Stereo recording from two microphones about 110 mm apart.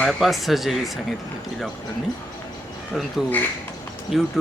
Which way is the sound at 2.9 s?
Centre (ahead or behind).